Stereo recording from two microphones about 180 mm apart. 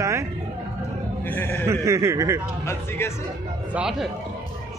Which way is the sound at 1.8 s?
15° right (ahead or behind).